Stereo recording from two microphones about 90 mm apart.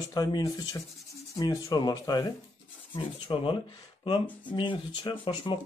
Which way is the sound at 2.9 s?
70° left (ahead or behind).